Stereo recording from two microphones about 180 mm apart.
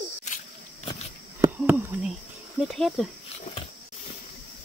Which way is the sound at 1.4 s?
10° right (ahead or behind).